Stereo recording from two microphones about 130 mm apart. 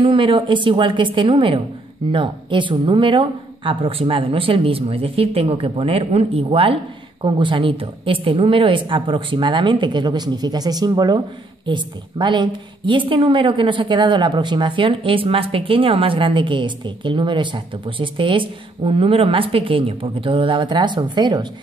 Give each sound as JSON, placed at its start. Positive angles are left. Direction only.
{"t": 0.0, "sound": "a woman's voice", "side_deg": -40}